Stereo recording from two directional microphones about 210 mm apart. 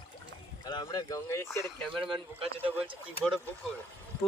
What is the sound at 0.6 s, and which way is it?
Speech, 20° left (ahead or behind).